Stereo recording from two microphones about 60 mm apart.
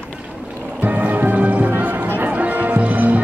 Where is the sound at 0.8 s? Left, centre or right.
Right.